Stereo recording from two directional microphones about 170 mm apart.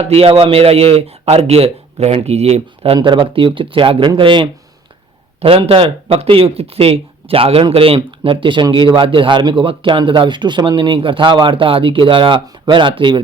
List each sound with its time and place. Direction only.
0.0 s a man's voice: 35° right (ahead or behind)